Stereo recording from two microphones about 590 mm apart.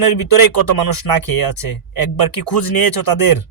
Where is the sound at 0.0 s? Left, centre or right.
Left.